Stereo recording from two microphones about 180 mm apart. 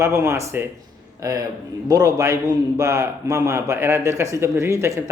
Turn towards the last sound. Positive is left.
turn(degrees=-15)  # may be behind; listen again after turning